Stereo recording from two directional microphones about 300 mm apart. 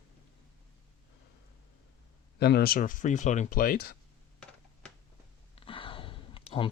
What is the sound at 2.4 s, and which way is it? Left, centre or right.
Speech, left.